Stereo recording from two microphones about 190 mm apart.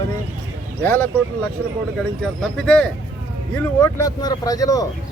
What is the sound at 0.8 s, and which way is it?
Speech, 10° left (ahead or behind).